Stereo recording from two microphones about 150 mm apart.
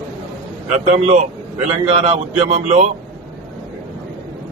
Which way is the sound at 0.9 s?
45° right (ahead or behind).